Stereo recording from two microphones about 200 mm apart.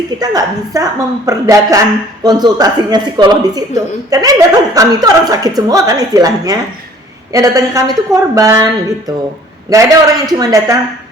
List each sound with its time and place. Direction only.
0.2 s a woman's voice: 15° right (ahead or behind)